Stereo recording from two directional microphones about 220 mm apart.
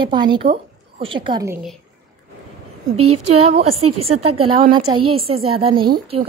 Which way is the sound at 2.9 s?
90° right.